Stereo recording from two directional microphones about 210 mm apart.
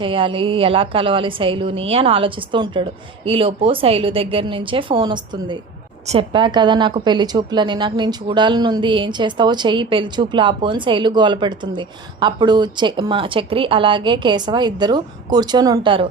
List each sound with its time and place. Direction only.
0.0 s a woman's voice: 25° right (ahead or behind)